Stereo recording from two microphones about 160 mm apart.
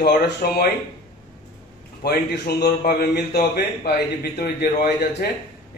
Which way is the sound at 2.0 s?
75° left (ahead or behind).